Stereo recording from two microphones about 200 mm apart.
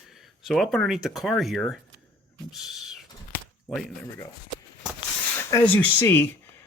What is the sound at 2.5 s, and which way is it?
Owl, centre (ahead or behind).